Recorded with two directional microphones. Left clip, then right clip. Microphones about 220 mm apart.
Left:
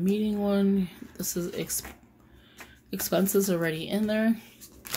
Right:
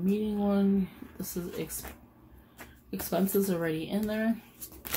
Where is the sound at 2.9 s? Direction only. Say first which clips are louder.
Left 4 dB; 50° left (ahead or behind).